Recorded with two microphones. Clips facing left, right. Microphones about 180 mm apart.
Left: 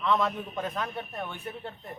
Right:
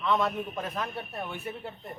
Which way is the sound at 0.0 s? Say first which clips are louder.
Even; centre (ahead or behind).